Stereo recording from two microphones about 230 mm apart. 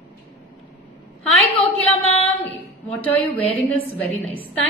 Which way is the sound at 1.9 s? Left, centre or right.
Left.